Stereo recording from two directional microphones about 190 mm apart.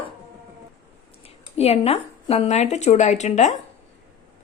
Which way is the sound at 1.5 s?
30° left (ahead or behind).